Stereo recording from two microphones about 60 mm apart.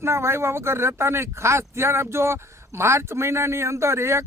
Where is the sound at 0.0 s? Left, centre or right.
Right.